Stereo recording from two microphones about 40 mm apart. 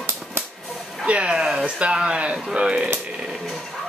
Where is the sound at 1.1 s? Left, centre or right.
Right.